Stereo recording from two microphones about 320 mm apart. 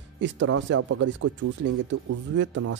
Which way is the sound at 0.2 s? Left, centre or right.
Right.